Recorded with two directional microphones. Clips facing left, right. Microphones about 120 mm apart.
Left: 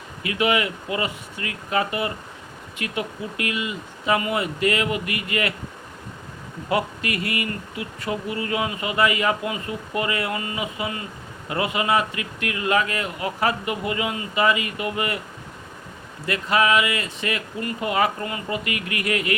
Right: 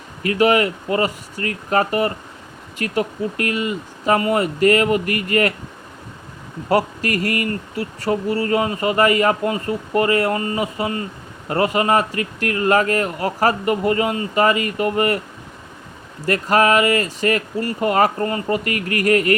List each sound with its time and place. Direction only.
0.2 s speech: 40° right (ahead or behind)
6.7 s speech: 40° right (ahead or behind)
16.2 s speech: 40° right (ahead or behind)